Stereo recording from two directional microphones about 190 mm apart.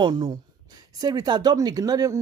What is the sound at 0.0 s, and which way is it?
Speech, 25° right (ahead or behind).